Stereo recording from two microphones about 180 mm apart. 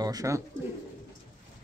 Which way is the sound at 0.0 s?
20° right (ahead or behind).